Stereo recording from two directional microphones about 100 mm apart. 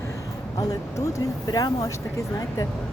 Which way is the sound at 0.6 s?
40° left (ahead or behind).